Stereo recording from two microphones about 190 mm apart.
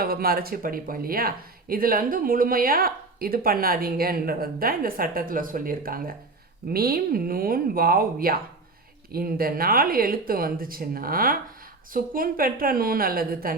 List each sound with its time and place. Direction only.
0.0 s speech: 50° right (ahead or behind)